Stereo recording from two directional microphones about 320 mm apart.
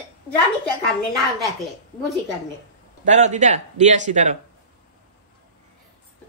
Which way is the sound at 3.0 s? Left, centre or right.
Right.